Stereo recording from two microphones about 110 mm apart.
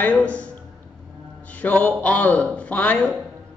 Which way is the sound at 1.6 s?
15° left (ahead or behind).